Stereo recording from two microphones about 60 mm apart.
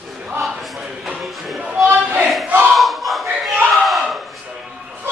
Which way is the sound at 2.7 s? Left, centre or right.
Centre.